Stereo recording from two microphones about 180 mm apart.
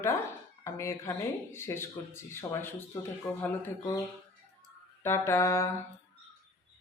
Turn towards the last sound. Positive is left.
turn(degrees=15)  # may be behind; listen again after turning